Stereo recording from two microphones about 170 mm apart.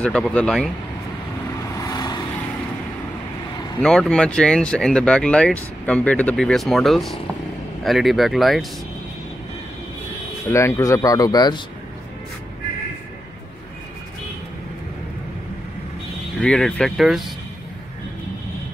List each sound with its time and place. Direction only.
0.0 s speech: 5° left (ahead or behind)
1.6 s vehicle: 20° left (ahead or behind)
3.8 s speech: 5° left (ahead or behind)
10.5 s speech: 15° left (ahead or behind)
16.3 s speech: 5° left (ahead or behind)